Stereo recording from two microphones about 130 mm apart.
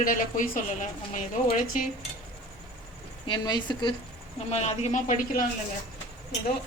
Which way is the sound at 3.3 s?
35° left (ahead or behind).